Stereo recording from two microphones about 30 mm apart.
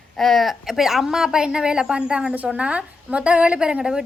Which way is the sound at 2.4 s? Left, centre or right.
Right.